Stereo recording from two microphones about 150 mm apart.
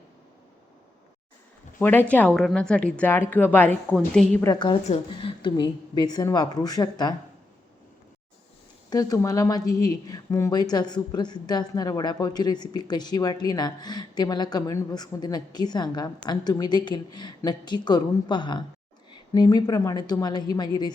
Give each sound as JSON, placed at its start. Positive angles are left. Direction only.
{"t": 1.8, "sound": "a woman's voice", "side_deg": 10}
{"t": 4.4, "sound": "speech", "side_deg": 30}
{"t": 8.9, "sound": "speech", "side_deg": 25}